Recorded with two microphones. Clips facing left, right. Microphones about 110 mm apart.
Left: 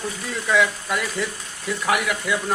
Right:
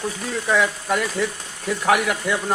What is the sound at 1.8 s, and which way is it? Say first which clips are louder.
Speech: right 3 dB; 45° right (ahead or behind).